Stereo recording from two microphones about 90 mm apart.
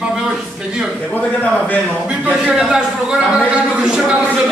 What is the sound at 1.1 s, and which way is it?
Speech, 15° left (ahead or behind).